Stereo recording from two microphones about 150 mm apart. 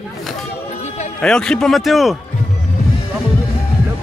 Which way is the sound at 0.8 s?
50° left (ahead or behind).